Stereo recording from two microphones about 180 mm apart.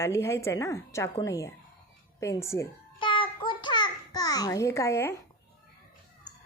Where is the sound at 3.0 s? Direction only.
30° left (ahead or behind).